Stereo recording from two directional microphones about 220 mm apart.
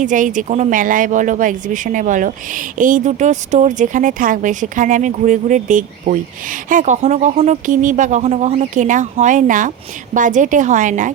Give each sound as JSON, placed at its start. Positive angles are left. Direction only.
{"t": 0.0, "sound": "speech", "side_deg": -35}